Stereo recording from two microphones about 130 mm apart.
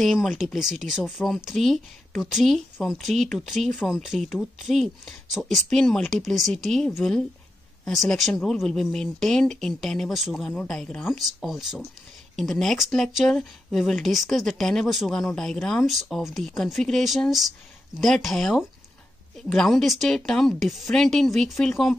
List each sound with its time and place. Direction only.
0.0 s speech: centre (ahead or behind)